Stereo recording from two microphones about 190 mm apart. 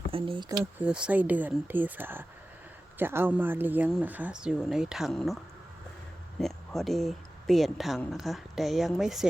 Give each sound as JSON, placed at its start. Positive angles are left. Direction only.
{"t": 0.1, "sound": "speech", "side_deg": -30}
{"t": 0.8, "sound": "speech", "side_deg": -5}
{"t": 6.4, "sound": "speech", "side_deg": 0}